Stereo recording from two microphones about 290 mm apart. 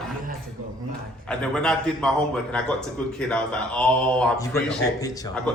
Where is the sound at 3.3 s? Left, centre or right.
Centre.